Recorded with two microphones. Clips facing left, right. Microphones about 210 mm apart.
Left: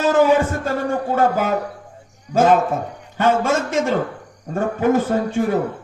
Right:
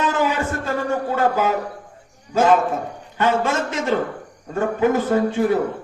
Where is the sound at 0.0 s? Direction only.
45° left (ahead or behind).